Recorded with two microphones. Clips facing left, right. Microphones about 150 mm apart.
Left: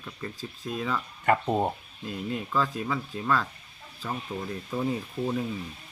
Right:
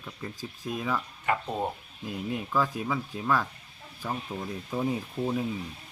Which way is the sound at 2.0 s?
10° right (ahead or behind).